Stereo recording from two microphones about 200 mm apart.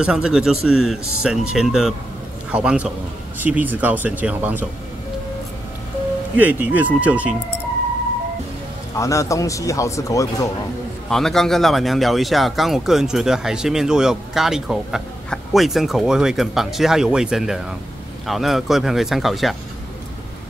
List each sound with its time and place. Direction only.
0.0 s speech: 5° right (ahead or behind)
6.3 s speech: 10° right (ahead or behind)
8.9 s speech: 15° left (ahead or behind)
11.1 s speech: centre (ahead or behind)